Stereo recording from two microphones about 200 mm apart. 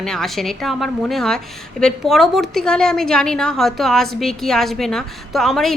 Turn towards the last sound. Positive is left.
turn(degrees=0)  # may be behind; listen again after turning